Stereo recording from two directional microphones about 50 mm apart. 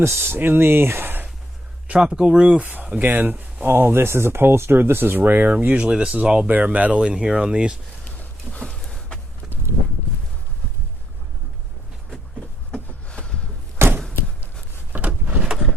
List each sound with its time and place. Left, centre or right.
0.0 s speech: right
2.0 s speech: centre
2.9 s speech: right
3.7 s speech: right
5.5 s speech: right
7.1 s speech: centre
8.6 s a sound: centre
13.1 s a sound: left
13.7 s a sound: right
14.9 s power windows: right